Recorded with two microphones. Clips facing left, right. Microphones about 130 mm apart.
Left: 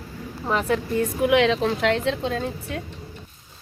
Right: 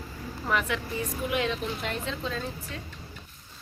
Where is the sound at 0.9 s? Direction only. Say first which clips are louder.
Left 12 dB; 85° left; by 2.8 s 60° left (ahead or behind).